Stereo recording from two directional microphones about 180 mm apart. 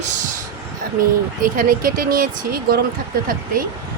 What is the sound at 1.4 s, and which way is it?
Speech, 50° right (ahead or behind).